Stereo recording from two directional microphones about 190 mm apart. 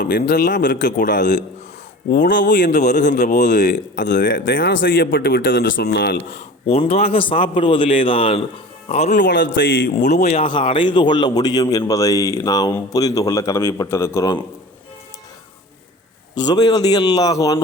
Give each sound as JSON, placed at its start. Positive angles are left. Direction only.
{"t": 0.1, "sound": "a man's voice", "side_deg": 55}
{"t": 6.3, "sound": "a man's voice", "side_deg": 30}
{"t": 9.1, "sound": "speech", "side_deg": 70}
{"t": 10.0, "sound": "speech", "side_deg": 40}
{"t": 10.4, "sound": "a man's voice", "side_deg": 25}
{"t": 16.5, "sound": "a man's voice", "side_deg": 20}